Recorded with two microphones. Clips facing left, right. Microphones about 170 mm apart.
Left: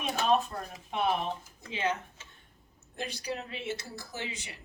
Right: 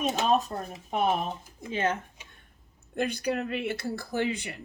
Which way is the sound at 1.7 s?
50° right (ahead or behind).